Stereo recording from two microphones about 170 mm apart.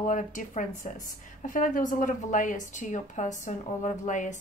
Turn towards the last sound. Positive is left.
turn(degrees=45)  # may be behind; listen again after turning